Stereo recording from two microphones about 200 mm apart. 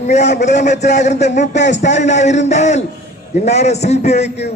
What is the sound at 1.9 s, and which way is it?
A man's voice, 35° left (ahead or behind).